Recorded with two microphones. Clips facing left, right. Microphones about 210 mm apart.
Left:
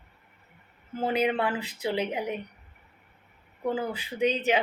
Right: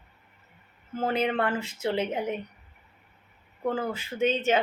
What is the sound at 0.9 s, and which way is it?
Speech, 15° left (ahead or behind).